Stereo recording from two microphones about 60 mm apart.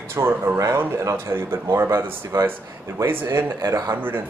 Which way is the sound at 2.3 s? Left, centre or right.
Right.